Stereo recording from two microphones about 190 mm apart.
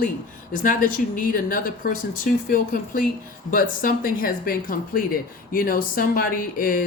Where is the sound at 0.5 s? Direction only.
45° left (ahead or behind).